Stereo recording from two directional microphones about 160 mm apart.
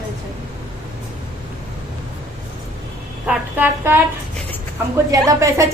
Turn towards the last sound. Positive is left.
turn(degrees=-20)  # may be behind; listen again after turning